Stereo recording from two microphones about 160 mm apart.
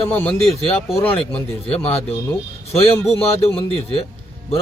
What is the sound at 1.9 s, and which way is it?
Speech, 40° left (ahead or behind).